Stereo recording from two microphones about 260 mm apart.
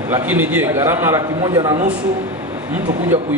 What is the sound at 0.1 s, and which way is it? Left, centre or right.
A man's voice, centre.